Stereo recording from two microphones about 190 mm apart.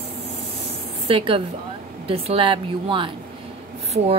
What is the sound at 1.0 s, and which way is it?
A woman's voice, 30° right (ahead or behind).